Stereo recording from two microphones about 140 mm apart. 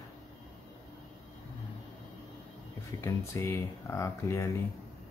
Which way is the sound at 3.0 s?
20° left (ahead or behind).